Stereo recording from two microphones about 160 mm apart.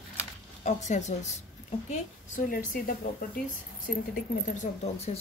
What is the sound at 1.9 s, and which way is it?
A woman's voice, 60° left (ahead or behind).